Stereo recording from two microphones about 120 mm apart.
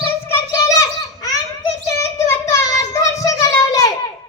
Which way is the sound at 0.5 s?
30° left (ahead or behind).